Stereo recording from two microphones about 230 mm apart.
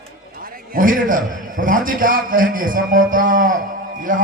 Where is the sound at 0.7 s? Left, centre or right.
Right.